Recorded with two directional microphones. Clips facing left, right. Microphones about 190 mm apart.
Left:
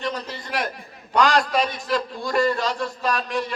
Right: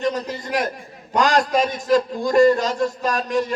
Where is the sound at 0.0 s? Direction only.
45° right (ahead or behind).